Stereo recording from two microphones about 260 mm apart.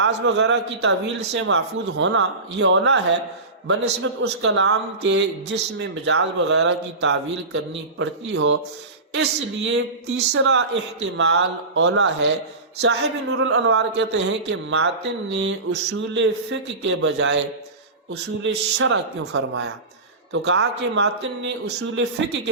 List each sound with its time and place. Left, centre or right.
0.0 s a woman's voice: right
13.2 s a woman's voice: right